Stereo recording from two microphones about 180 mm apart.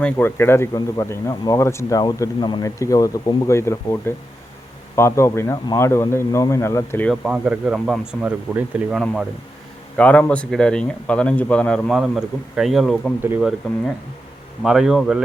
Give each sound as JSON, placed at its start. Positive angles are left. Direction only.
{"t": 0.0, "sound": "speech", "side_deg": 10}
{"t": 7.3, "sound": "speech", "side_deg": -5}
{"t": 13.2, "sound": "speech", "side_deg": -10}
{"t": 14.6, "sound": "speech", "side_deg": 0}